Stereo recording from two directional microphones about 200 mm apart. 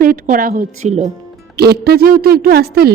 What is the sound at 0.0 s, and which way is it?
Speech, 45° right (ahead or behind).